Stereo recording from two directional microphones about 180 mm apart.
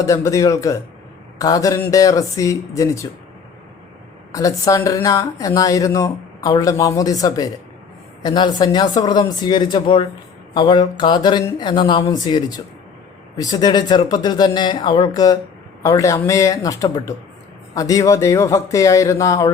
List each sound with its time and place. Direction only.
0.0 s speech: 15° left (ahead or behind)
4.3 s speech: 20° left (ahead or behind)